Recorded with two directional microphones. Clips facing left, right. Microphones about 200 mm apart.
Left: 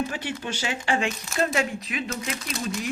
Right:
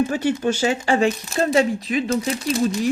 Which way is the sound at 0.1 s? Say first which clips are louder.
Right 11 dB; 45° right (ahead or behind).